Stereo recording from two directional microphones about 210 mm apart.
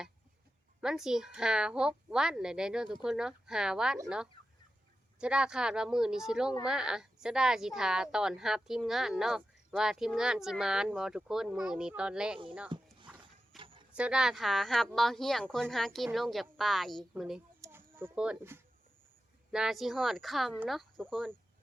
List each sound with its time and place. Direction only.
0.8 s a woman's voice: 5° right (ahead or behind)
13.1 s horse: 5° right (ahead or behind)
13.6 s a sound: 25° right (ahead or behind)
13.9 s a woman's voice: 5° right (ahead or behind)
17.6 s a sound: 10° right (ahead or behind)
19.5 s a woman's voice: 5° right (ahead or behind)